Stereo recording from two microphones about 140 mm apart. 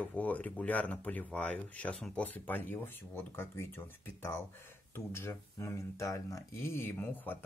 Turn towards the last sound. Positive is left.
turn(degrees=15)  # may be behind; listen again after turning